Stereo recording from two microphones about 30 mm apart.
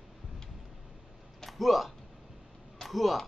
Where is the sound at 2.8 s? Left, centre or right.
Centre.